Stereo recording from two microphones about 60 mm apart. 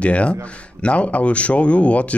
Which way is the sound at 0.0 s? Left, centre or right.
Left.